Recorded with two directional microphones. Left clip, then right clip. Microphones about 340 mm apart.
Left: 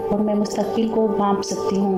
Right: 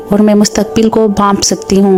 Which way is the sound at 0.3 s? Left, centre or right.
Right.